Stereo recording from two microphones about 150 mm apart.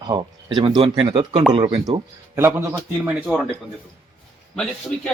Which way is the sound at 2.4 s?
15° right (ahead or behind).